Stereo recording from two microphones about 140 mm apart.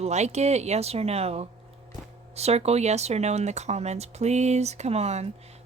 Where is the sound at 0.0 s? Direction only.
55° right (ahead or behind).